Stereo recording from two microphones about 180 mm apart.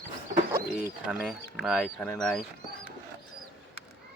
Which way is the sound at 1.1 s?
5° right (ahead or behind).